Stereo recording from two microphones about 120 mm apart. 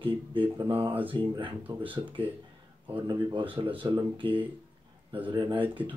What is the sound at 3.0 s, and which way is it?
Speech, 40° right (ahead or behind).